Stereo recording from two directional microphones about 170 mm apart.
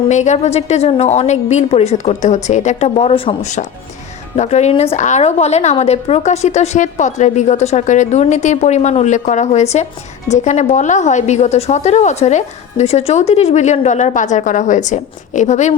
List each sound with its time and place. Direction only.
0.1 s a woman's voice: 45° left (ahead or behind)